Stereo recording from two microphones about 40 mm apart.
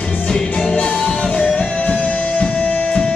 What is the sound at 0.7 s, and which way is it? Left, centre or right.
Music, left.